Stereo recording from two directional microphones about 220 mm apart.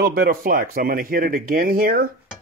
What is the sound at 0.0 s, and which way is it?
Speech, 45° right (ahead or behind).